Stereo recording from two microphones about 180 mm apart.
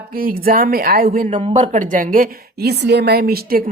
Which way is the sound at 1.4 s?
35° right (ahead or behind).